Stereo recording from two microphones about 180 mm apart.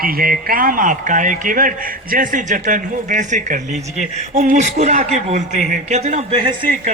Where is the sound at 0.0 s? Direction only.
55° right (ahead or behind); by 6.9 s 30° right (ahead or behind).